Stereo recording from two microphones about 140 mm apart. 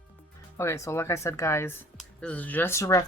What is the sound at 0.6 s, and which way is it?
Speech, 20° left (ahead or behind).